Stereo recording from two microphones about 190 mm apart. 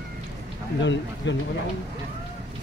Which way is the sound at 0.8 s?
70° left (ahead or behind).